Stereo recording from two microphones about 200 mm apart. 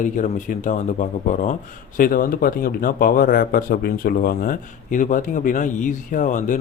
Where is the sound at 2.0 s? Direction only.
45° left (ahead or behind).